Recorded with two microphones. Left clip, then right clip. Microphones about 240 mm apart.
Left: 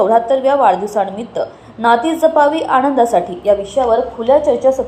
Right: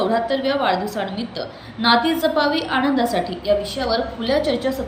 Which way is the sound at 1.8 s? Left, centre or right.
Centre.